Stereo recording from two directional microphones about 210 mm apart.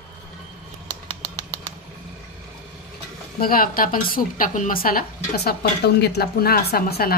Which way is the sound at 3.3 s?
45° left (ahead or behind).